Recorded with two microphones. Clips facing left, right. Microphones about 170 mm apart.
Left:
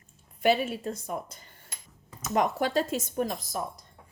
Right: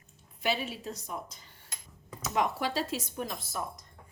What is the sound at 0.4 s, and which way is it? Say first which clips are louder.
A woman's voice: left 7 dB; 50° left (ahead or behind).